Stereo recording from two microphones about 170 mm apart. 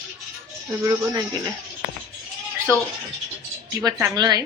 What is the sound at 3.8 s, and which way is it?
Speech, 20° right (ahead or behind).